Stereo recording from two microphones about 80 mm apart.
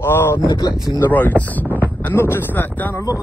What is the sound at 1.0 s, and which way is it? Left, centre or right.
Speech, left.